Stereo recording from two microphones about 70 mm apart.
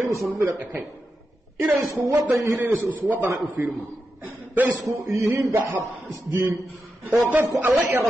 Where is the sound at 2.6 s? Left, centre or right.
Right.